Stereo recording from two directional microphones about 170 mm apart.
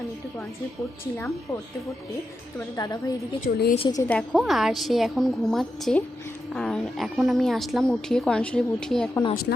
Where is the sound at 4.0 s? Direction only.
5° left (ahead or behind).